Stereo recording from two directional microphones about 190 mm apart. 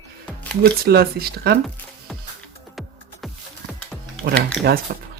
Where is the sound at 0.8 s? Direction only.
55° right (ahead or behind).